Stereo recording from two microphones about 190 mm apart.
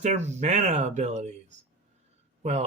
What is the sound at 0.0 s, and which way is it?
Speech, 35° right (ahead or behind).